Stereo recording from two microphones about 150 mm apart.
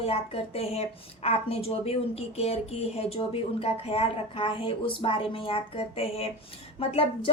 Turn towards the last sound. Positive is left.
turn(degrees=40)  # may be behind; listen again after turning